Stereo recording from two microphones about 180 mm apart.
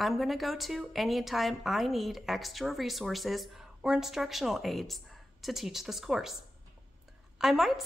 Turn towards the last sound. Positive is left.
turn(degrees=0)  # may be behind; listen again after turning